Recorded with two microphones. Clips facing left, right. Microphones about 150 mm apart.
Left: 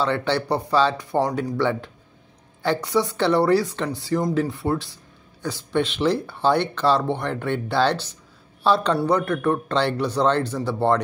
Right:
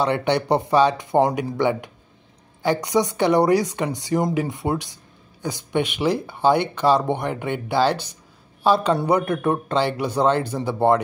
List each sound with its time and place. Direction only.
0.0 s speech: 15° right (ahead or behind)